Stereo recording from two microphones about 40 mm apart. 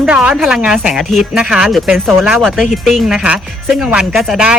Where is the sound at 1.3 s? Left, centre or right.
Right.